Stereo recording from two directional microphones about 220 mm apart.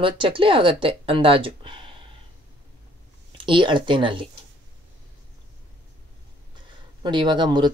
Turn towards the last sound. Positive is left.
turn(degrees=-20)  # may be behind; listen again after turning